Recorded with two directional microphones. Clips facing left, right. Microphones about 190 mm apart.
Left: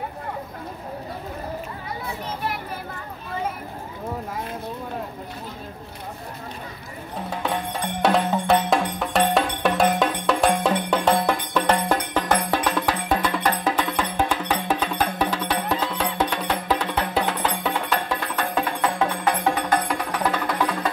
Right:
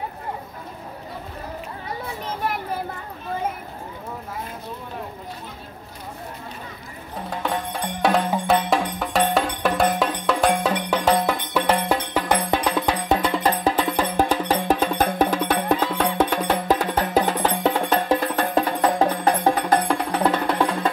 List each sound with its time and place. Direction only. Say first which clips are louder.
8.0 s music: even; centre (ahead or behind); by 20.6 s 30° right (ahead or behind)